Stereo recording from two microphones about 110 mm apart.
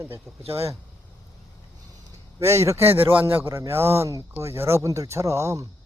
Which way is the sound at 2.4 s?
25° right (ahead or behind).